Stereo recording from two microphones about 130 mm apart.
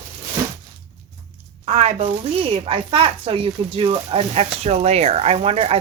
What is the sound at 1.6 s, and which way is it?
Speech, 55° right (ahead or behind).